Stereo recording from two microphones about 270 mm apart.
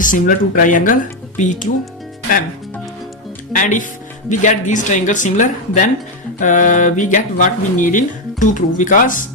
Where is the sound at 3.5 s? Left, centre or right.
Left.